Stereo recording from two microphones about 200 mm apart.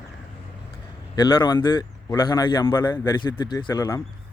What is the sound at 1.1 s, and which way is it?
Speech, 20° left (ahead or behind).